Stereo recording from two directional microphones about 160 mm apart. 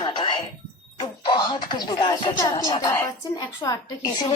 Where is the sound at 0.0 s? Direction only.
30° left (ahead or behind).